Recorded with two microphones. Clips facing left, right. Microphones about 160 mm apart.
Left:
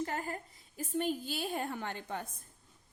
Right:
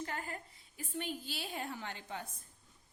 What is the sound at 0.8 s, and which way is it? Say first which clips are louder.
A woman's voice: left 7 dB; 45° left (ahead or behind).